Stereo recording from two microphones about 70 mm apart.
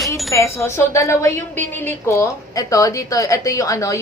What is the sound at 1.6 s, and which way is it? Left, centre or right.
Speech, left.